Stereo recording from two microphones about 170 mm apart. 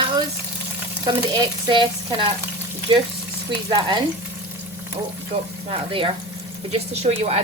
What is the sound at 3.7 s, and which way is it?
Frying, 30° right (ahead or behind).